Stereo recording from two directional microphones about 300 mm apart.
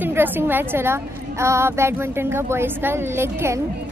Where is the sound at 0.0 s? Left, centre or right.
Centre.